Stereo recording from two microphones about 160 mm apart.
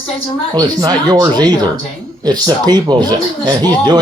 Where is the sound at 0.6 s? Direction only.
25° right (ahead or behind).